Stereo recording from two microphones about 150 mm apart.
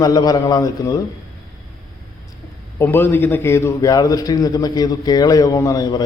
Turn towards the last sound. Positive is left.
turn(degrees=25)  # may be behind; listen again after turning